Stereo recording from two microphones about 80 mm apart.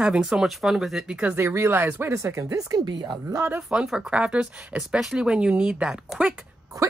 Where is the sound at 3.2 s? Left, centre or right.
Right.